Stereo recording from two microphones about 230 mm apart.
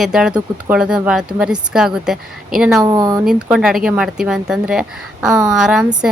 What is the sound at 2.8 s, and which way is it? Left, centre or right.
Speech, centre.